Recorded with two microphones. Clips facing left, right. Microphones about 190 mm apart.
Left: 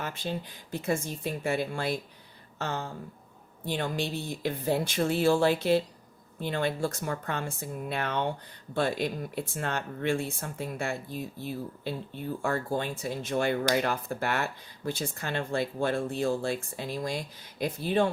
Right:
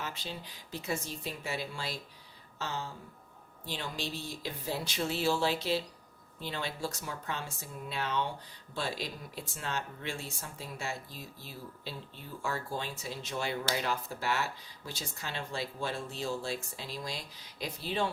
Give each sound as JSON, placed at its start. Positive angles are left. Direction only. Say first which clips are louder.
{"t": 0.0, "sound": "speech", "louder": "left 7 dB", "side_deg": 50}